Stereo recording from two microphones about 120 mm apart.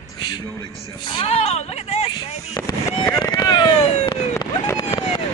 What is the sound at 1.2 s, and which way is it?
Speech, 55° left (ahead or behind).